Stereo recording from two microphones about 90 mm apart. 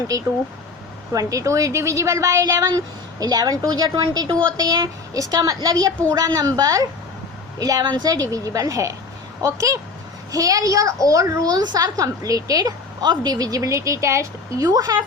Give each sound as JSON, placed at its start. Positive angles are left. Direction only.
{"t": 1.3, "sound": "a woman's voice", "side_deg": -35}